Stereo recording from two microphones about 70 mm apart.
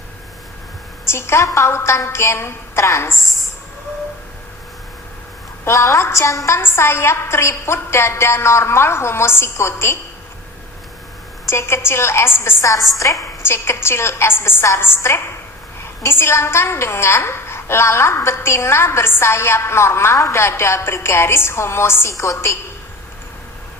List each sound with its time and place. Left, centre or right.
1.0 s a sound: left
1.5 s a woman's voice: left
5.6 s a woman's voice: left
11.4 s a woman's voice: left
12.6 s a woman's voice: left